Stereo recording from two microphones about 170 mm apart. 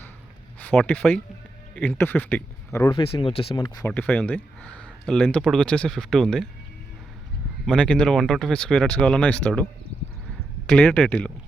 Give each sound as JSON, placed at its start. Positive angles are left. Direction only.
{"t": 0.6, "sound": "speech", "side_deg": 5}
{"t": 3.0, "sound": "speech", "side_deg": 30}
{"t": 3.8, "sound": "speech", "side_deg": 10}
{"t": 7.7, "sound": "speech", "side_deg": 5}
{"t": 10.7, "sound": "speech", "side_deg": 5}